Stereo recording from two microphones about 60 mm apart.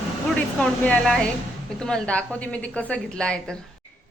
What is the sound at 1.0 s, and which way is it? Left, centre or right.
A woman's voice, centre.